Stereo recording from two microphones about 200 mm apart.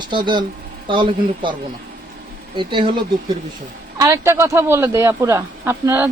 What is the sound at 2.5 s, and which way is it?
Speech, 25° right (ahead or behind).